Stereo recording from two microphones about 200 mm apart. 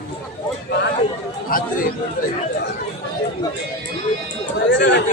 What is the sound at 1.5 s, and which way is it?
Speech, 45° left (ahead or behind).